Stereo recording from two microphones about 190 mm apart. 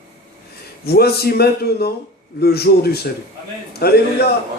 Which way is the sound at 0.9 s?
55° left (ahead or behind).